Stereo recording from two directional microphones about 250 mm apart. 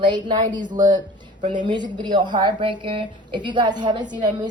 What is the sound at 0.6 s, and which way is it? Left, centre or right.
A woman's voice, right.